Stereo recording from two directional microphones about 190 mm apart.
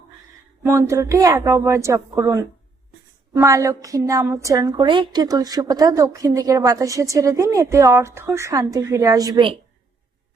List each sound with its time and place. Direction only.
0.6 s a woman's voice: 15° right (ahead or behind)